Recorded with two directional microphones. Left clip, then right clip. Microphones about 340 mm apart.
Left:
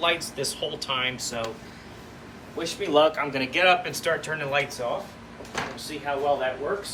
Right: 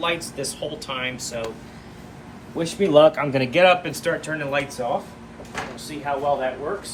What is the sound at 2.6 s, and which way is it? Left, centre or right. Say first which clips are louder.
Speech: right 6 dB; centre.